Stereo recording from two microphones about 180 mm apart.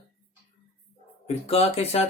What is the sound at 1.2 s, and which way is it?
Speech, 35° left (ahead or behind).